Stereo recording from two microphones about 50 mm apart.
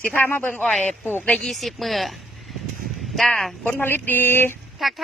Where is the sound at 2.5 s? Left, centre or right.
Centre.